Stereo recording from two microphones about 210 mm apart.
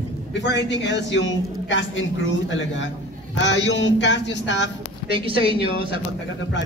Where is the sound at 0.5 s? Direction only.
60° left (ahead or behind).